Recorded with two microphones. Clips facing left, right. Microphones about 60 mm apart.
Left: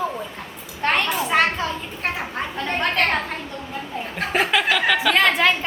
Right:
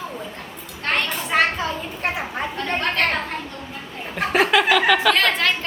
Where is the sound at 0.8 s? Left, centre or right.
Centre.